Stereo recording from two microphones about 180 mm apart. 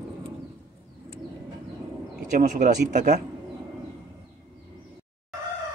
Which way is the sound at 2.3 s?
45° right (ahead or behind).